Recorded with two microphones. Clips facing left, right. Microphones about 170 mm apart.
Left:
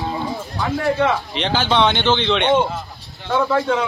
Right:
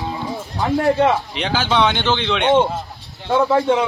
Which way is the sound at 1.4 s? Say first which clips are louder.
Even; 5° right (ahead or behind).